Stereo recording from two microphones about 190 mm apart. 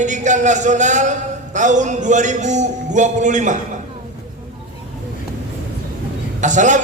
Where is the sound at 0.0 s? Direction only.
40° right (ahead or behind).